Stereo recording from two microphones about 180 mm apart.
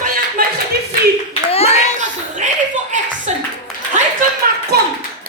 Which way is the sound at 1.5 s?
35° left (ahead or behind).